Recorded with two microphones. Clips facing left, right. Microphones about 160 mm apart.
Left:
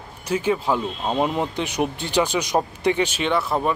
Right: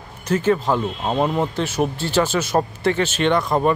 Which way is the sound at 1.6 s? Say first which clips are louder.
Right 3 dB; 15° left (ahead or behind).